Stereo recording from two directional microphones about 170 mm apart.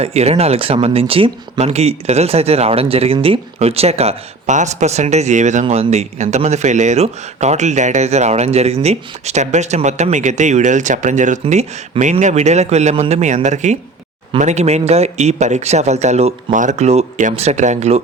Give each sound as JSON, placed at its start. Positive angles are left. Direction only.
{"t": 0.0, "sound": "speech", "side_deg": -40}